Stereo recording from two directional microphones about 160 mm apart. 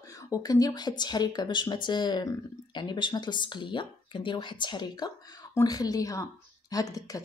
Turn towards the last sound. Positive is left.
turn(degrees=20)  # may be behind; listen again after turning